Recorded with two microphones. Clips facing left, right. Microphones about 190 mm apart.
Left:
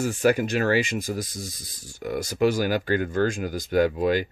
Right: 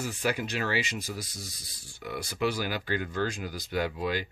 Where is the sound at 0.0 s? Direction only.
45° left (ahead or behind).